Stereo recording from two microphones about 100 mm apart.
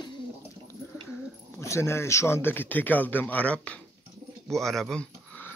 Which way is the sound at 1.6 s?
30° left (ahead or behind).